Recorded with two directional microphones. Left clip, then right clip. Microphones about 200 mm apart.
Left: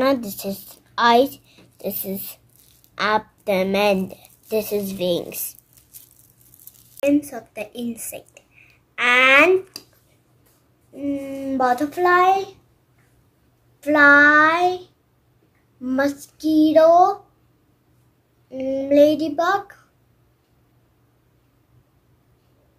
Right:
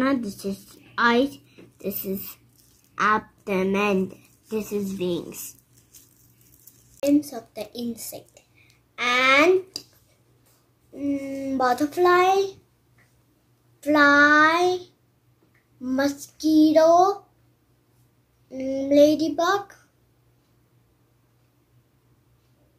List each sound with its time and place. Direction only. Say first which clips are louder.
0.0 s a woman's voice: left 5 dB; 40° left (ahead or behind)
1.8 s speech: left 2 dB; 30° left (ahead or behind)
3.4 s a woman's voice: left 5 dB; 30° left (ahead or behind)
7.0 s a child's voice: left 2 dB; 5° left (ahead or behind)
8.6 s speech: left 6 dB; 5° right (ahead or behind)
10.9 s a child's voice: left 1 dB; 5° right (ahead or behind)
13.7 s a child's voice: left 4 dB; centre (ahead or behind)
18.5 s a child's voice: left 3 dB; centre (ahead or behind)